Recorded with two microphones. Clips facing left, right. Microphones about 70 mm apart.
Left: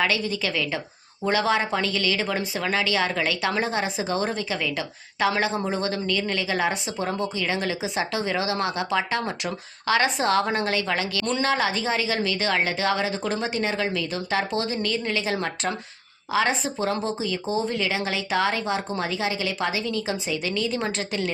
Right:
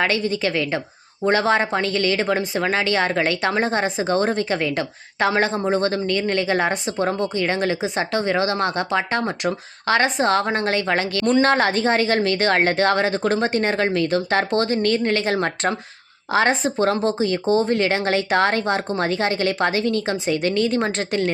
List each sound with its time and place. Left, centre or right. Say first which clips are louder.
0.0 s a woman's voice: right 4 dB; right
3.6 s a woman's voice: right 5 dB; right
11.4 s a woman's voice: right 6 dB; right